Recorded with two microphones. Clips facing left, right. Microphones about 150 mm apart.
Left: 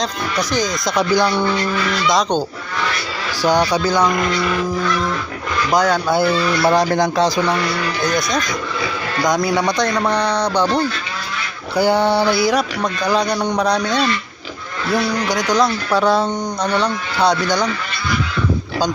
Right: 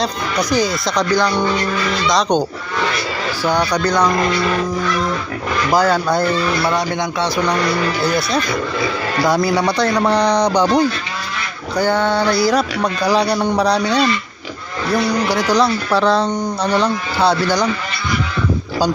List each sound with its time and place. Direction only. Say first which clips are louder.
0.0 s speech: right 2 dB; 10° right (ahead or behind)
0.9 s speech: left 1 dB; 10° left (ahead or behind)
3.4 s speech: left 2 dB; 10° left (ahead or behind)
5.7 s a man's voice: right 1 dB; 5° right (ahead or behind)
6.7 s speech: left 4 dB; 35° left (ahead or behind)
8.0 s a man's voice: right 2 dB; 5° right (ahead or behind)
11.8 s a man's voice: left 1 dB; 10° left (ahead or behind)
12.8 s speech: right 2 dB; 10° right (ahead or behind)
14.8 s a man's voice: right 2 dB; centre (ahead or behind)